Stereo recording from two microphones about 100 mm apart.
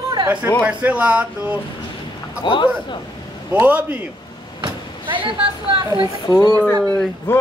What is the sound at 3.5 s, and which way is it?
Speech, 15° right (ahead or behind).